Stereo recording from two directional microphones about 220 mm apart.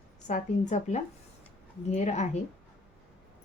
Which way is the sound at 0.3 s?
35° left (ahead or behind).